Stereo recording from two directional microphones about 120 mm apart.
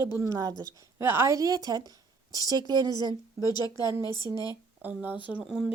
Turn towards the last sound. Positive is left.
turn(degrees=-10)  # may be behind; listen again after turning